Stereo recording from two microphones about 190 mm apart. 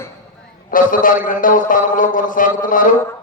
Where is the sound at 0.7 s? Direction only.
45° left (ahead or behind).